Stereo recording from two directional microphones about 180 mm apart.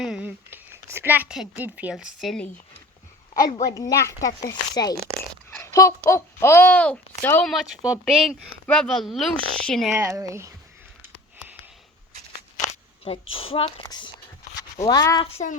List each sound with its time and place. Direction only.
0.0 s speech: 5° right (ahead or behind)
3.4 s a woman's voice: 20° left (ahead or behind)
5.5 s a sound: 15° left (ahead or behind)
6.1 s a child's voice: 15° left (ahead or behind)
7.5 s speech: 5° right (ahead or behind)
9.9 s speech: 15° right (ahead or behind)
13.3 s a woman's voice: 30° left (ahead or behind)
15.3 s a woman's voice: 35° left (ahead or behind)